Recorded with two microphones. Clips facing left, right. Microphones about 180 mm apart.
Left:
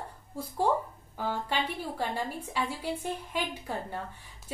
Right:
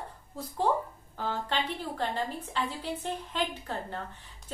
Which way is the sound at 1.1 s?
10° left (ahead or behind).